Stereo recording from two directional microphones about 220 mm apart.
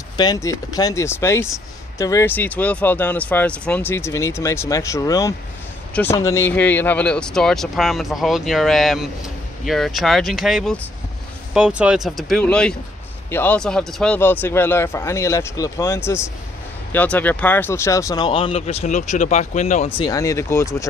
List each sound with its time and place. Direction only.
0.2 s speech: 15° left (ahead or behind)